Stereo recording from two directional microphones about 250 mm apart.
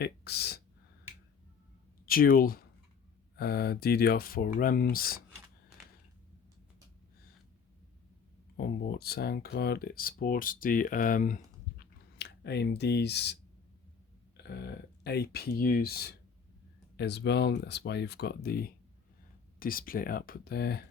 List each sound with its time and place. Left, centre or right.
0.0 s a sound: left
2.0 s speech: left
8.5 s speech: left
12.1 s speech: left
14.3 s speech: left